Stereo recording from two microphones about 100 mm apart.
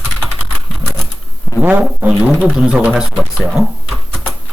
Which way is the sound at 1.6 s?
15° right (ahead or behind).